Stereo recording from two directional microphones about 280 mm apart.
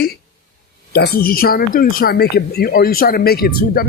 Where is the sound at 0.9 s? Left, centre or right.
Left.